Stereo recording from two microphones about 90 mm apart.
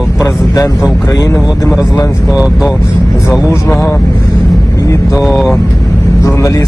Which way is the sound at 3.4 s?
30° left (ahead or behind).